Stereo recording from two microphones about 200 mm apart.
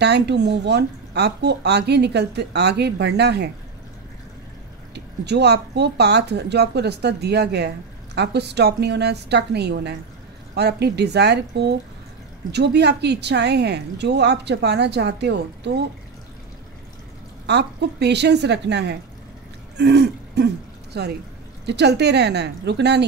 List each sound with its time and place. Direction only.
0.0 s speech: 55° right (ahead or behind)
4.9 s speech: 55° right (ahead or behind)
17.5 s speech: 60° right (ahead or behind)
19.8 s throat clearing: 60° right (ahead or behind)
20.9 s speech: 55° right (ahead or behind)